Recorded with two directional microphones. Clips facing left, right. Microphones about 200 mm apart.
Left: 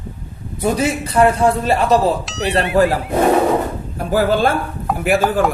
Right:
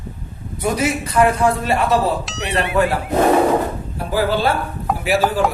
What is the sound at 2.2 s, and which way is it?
Speech, centre (ahead or behind).